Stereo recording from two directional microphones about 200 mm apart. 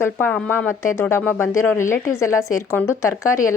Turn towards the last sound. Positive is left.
turn(degrees=15)  # may be behind; listen again after turning